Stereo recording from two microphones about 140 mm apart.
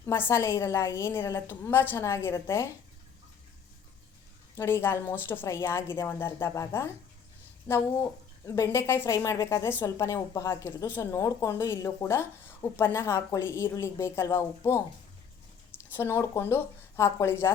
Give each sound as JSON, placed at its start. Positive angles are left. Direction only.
{"t": 0.0, "sound": "a woman's voice", "side_deg": 20}
{"t": 4.5, "sound": "a woman's voice", "side_deg": 20}
{"t": 15.9, "sound": "a woman's voice", "side_deg": 15}